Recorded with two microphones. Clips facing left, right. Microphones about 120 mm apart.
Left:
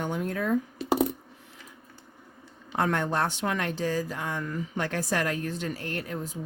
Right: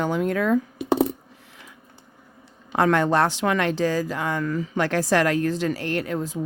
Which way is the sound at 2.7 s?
90° right.